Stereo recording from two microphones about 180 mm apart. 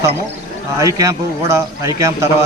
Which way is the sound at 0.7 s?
15° right (ahead or behind).